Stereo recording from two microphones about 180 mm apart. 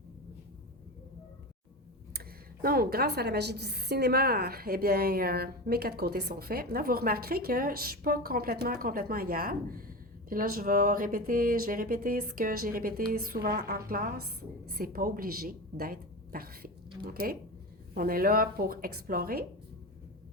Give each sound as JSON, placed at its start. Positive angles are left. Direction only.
{"t": 2.1, "sound": "a woman's voice", "side_deg": -55}